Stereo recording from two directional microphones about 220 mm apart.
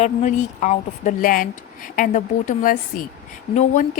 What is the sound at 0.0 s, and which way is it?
A woman's voice, 35° left (ahead or behind).